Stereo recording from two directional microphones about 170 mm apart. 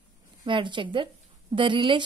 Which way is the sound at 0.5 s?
30° right (ahead or behind).